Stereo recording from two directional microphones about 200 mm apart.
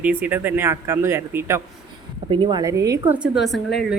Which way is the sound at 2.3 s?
25° right (ahead or behind).